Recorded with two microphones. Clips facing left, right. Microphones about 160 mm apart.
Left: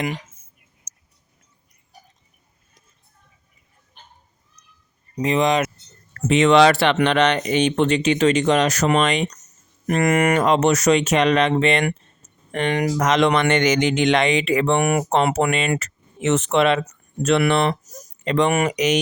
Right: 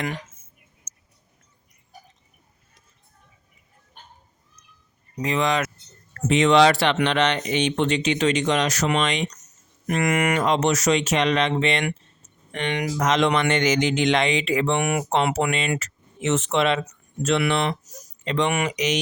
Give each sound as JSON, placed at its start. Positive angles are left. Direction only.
{"t": 0.9, "sound": "whispering", "side_deg": 10}
{"t": 5.1, "sound": "speech", "side_deg": 20}
{"t": 6.2, "sound": "speech", "side_deg": 60}
{"t": 12.5, "sound": "speech", "side_deg": 45}
{"t": 13.0, "sound": "speech", "side_deg": 70}